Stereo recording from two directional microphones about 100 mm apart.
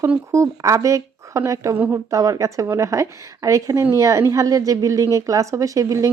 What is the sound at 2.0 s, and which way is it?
A woman's voice, 35° right (ahead or behind).